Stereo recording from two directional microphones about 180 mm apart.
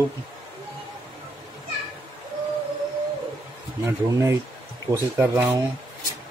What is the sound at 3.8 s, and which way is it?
Speech, 15° right (ahead or behind).